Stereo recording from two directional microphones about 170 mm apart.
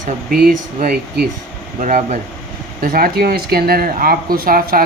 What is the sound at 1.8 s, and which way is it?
Speech, 45° right (ahead or behind).